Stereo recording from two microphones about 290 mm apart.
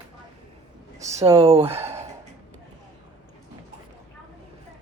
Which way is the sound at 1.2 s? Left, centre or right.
Centre.